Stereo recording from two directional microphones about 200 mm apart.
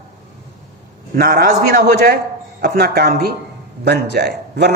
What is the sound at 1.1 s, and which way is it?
A woman's voice, 45° right (ahead or behind).